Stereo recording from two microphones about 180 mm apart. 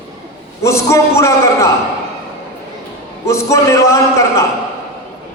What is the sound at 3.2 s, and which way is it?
A man's voice, 15° left (ahead or behind).